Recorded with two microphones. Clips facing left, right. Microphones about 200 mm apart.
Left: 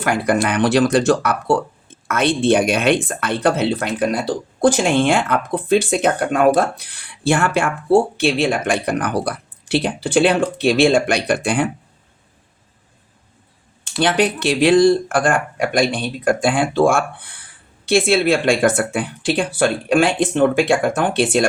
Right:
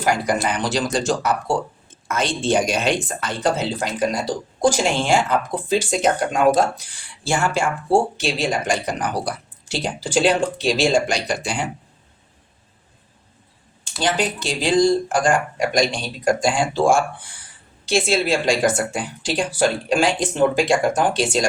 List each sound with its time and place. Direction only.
0.0 s speech: 55° left (ahead or behind)
14.0 s speech: 65° left (ahead or behind)